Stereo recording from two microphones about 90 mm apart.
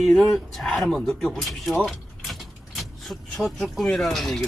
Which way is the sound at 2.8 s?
Centre (ahead or behind).